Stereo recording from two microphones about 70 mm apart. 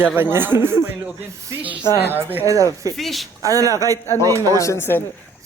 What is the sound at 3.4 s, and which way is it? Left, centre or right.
A man's voice, right.